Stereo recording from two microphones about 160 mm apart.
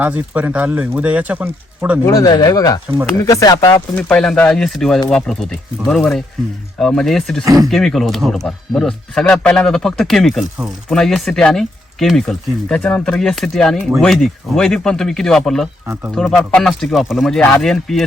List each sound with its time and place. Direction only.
0.0 s speech: 10° right (ahead or behind)
2.0 s speech: 25° left (ahead or behind)
3.9 s speech: 5° left (ahead or behind)
7.4 s speech: 20° right (ahead or behind)
7.7 s speech: centre (ahead or behind)